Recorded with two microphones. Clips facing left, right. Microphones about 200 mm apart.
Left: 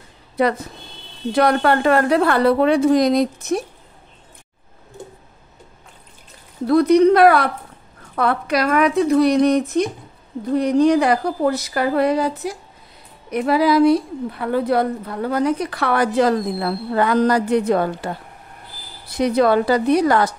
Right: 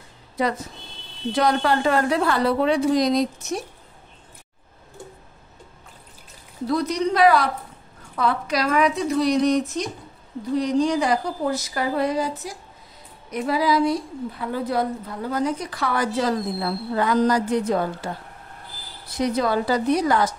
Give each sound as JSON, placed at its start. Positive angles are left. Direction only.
{"t": 0.4, "sound": "a woman's voice", "side_deg": 60}
{"t": 6.7, "sound": "a woman's voice", "side_deg": 60}